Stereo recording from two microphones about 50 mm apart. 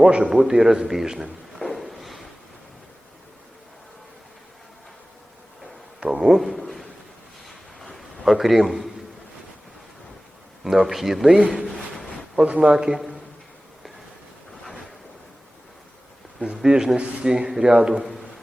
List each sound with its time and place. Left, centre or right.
0.0 s a man's voice: right
0.4 s a man's voice: centre
1.6 s a sound: centre
6.1 s a man's voice: centre
6.6 s a sound: centre
8.2 s a man's voice: centre
10.6 s a man's voice: centre
16.6 s a man's voice: centre